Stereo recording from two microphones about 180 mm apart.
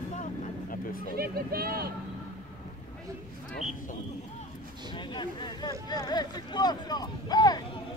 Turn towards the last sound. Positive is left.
turn(degrees=20)  # may be behind; listen again after turning